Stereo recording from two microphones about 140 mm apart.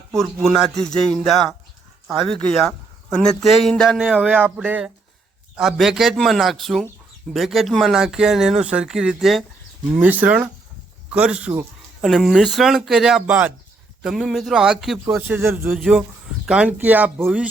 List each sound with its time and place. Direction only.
0.5 s speech: centre (ahead or behind)
15.0 s speech: 15° right (ahead or behind)
15.8 s speech: 5° right (ahead or behind)